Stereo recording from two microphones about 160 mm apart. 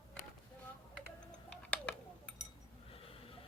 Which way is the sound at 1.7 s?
10° left (ahead or behind).